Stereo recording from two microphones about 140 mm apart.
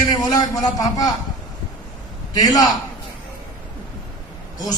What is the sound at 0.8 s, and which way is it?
Speech, 25° left (ahead or behind).